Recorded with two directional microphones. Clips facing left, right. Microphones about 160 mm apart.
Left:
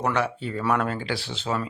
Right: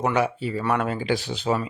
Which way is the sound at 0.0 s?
10° right (ahead or behind).